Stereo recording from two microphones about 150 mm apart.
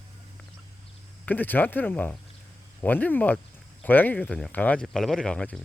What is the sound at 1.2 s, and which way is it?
Speech, 10° left (ahead or behind).